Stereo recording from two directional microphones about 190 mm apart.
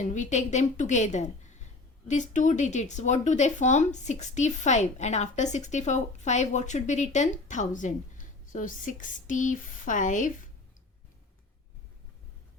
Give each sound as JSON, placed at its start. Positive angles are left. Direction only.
{"t": 0.0, "sound": "speech", "side_deg": 40}